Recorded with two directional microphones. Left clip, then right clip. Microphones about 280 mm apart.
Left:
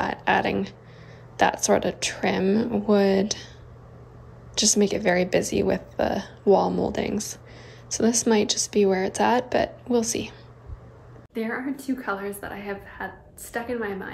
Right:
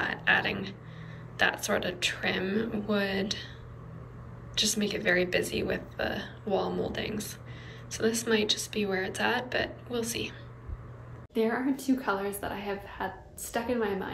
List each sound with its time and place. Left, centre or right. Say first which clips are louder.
0.0 s a sound: left 4 dB; centre
1.3 s speech: left 7 dB; left
4.6 s speech: left 7 dB; left
11.3 s a woman's voice: right 1 dB; centre